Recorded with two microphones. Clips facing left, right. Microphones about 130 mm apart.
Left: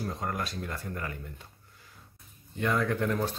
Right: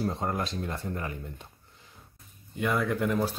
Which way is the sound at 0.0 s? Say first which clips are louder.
Right 4 dB; 25° right (ahead or behind).